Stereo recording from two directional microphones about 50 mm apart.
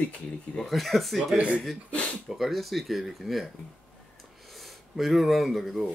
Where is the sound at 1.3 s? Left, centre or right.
Right.